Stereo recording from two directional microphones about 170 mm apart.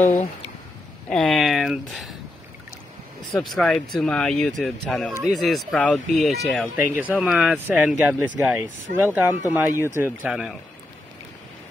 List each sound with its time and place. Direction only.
0.0 s speech: 40° left (ahead or behind)
1.1 s speech: centre (ahead or behind)
3.4 s speech: 5° left (ahead or behind); by 10.1 s 15° right (ahead or behind)
10.2 s speech: 5° right (ahead or behind)